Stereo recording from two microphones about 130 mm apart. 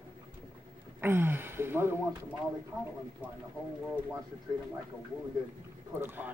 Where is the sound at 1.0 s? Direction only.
15° right (ahead or behind).